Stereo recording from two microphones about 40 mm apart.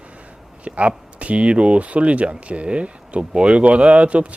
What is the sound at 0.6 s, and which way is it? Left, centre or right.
Speech, right.